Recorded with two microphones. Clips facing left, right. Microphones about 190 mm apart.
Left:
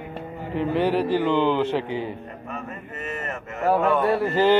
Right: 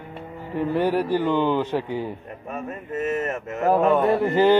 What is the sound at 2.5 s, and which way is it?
Speech, 45° right (ahead or behind).